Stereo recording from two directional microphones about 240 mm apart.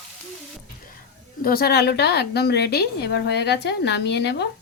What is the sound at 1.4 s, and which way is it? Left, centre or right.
A woman's voice, left.